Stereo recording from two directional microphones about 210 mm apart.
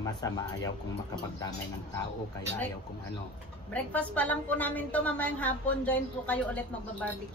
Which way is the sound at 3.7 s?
5° left (ahead or behind).